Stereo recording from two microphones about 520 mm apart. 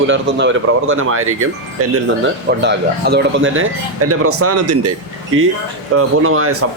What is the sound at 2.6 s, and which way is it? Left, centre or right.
Speech, centre.